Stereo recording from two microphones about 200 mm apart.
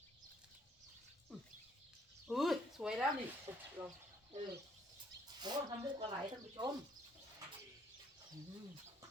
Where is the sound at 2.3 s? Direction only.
Centre (ahead or behind).